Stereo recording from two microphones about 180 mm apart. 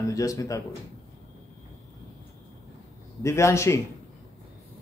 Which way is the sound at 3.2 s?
15° left (ahead or behind).